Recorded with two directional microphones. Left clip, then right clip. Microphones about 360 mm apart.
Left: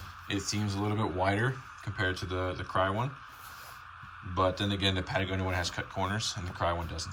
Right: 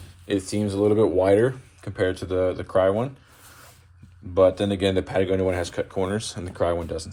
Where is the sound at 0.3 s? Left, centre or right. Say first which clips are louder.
Right 9 dB; centre.